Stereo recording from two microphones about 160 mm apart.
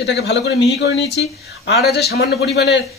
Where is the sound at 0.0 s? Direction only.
90° left.